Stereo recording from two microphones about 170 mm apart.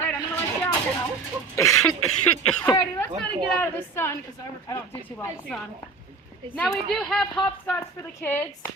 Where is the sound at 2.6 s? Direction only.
15° left (ahead or behind).